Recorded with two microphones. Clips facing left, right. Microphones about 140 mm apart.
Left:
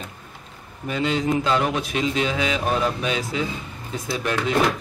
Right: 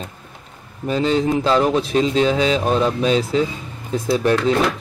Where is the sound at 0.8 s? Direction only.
35° right (ahead or behind).